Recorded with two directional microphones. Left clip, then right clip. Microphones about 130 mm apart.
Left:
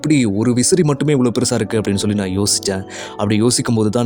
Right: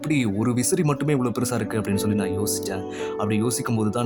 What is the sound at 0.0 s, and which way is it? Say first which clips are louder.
Speech: left 8 dB; 35° left (ahead or behind).